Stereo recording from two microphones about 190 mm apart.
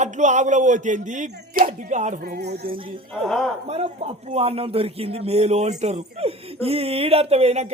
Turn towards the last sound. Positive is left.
turn(degrees=-35)  # may be behind; listen again after turning